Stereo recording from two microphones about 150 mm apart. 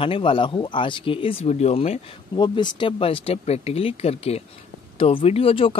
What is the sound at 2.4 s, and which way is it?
Speech, 30° left (ahead or behind).